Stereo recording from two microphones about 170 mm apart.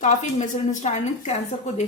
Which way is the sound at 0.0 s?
50° left (ahead or behind).